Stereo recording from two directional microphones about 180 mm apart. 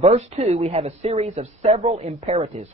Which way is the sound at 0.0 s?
35° right (ahead or behind).